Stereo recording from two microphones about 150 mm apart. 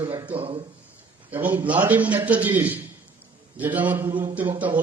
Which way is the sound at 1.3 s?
10° right (ahead or behind).